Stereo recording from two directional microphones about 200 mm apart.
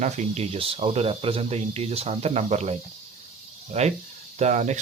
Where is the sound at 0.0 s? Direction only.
35° right (ahead or behind).